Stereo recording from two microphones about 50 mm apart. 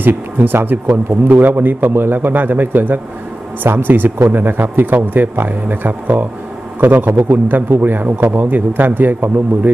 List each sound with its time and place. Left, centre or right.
0.0 s a man's voice: right